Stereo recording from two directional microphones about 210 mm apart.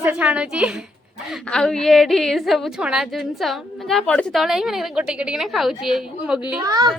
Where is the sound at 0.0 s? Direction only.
5° right (ahead or behind).